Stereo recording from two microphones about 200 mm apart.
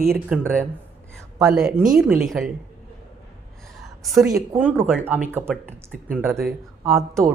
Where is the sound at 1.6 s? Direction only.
45° right (ahead or behind).